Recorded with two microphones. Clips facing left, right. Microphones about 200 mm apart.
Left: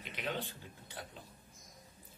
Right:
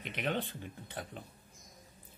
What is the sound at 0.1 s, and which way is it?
Speech, 60° right (ahead or behind).